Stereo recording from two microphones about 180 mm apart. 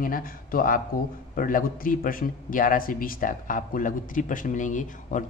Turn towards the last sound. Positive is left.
turn(degrees=45)  # may be behind; listen again after turning